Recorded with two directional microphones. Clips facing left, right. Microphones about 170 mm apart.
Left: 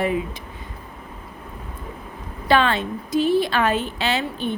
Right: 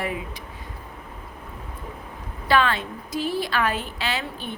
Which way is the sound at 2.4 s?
25° left (ahead or behind).